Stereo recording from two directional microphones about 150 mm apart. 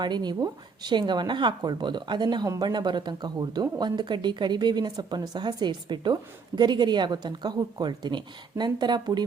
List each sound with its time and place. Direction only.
0.0 s speech: 30° right (ahead or behind)